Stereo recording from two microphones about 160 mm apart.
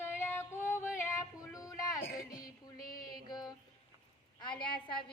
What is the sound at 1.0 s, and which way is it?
Speech, 20° left (ahead or behind).